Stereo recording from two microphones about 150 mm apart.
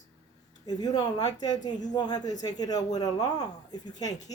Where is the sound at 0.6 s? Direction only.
25° left (ahead or behind).